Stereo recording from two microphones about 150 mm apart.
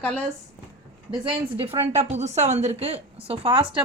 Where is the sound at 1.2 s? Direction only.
35° right (ahead or behind).